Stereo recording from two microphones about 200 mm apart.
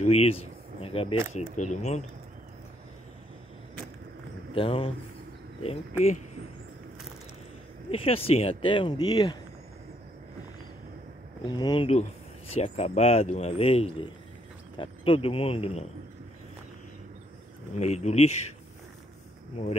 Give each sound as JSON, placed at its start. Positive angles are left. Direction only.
{"t": 0.0, "sound": "speech", "side_deg": 30}
{"t": 4.6, "sound": "speech", "side_deg": 30}
{"t": 7.9, "sound": "speech", "side_deg": 30}
{"t": 11.4, "sound": "speech", "side_deg": 20}
{"t": 17.7, "sound": "speech", "side_deg": 35}